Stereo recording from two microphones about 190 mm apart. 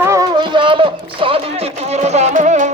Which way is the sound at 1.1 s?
30° right (ahead or behind).